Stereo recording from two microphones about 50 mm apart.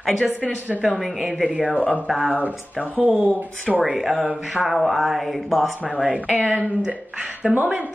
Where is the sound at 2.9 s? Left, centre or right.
Right.